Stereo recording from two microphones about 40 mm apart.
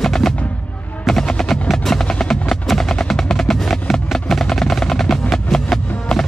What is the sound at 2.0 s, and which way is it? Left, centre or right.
Music, centre.